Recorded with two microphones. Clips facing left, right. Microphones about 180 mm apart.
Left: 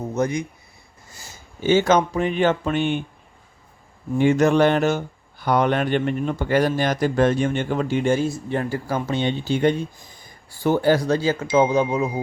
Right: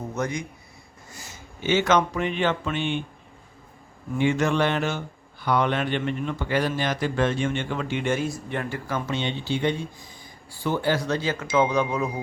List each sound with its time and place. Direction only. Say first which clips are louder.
0.1 s speech: left 7 dB; 25° left (ahead or behind); by 3.0 s 45° left (ahead or behind)
4.2 s speech: left 6 dB; 40° left (ahead or behind); by 12.2 s 25° left (ahead or behind)